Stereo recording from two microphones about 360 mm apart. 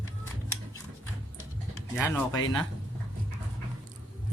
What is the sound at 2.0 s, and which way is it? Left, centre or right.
Speech, centre.